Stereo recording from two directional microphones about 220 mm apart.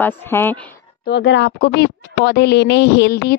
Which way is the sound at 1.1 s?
50° left (ahead or behind).